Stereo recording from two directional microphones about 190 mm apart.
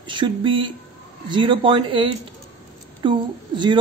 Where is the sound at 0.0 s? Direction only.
25° right (ahead or behind).